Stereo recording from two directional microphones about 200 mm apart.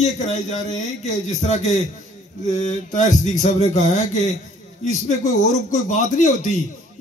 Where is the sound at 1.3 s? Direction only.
35° left (ahead or behind).